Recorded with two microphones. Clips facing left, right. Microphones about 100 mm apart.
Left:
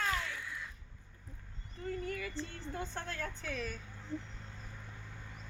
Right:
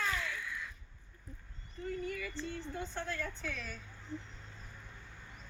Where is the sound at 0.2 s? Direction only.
30° left (ahead or behind).